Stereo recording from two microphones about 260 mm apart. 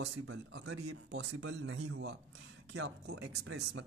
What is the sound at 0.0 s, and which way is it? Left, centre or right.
Speech, right.